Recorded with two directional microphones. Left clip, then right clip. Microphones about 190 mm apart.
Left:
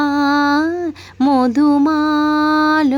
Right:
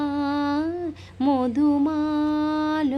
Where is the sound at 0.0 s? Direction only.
40° left (ahead or behind).